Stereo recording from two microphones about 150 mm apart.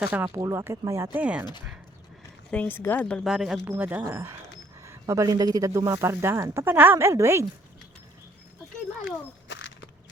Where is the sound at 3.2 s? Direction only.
5° right (ahead or behind).